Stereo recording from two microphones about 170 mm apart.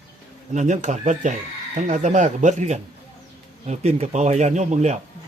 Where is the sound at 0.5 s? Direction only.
45° right (ahead or behind).